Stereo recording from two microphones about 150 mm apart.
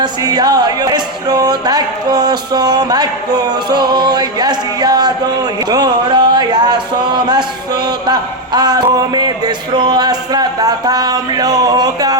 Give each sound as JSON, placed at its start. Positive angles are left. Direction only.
{"t": 0.0, "sound": "music", "side_deg": -25}
{"t": 7.9, "sound": "speech", "side_deg": -30}